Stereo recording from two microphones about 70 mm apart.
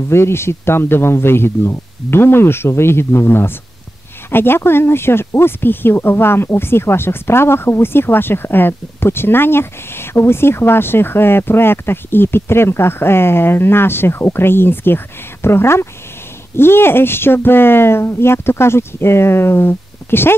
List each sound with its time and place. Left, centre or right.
0.1 s speech: left